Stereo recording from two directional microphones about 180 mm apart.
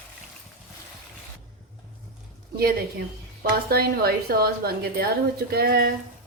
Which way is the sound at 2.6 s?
60° right (ahead or behind).